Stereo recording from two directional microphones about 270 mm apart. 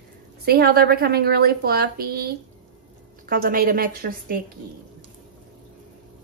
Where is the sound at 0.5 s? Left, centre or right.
Right.